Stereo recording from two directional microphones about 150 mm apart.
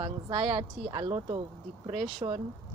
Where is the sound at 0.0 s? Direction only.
35° right (ahead or behind).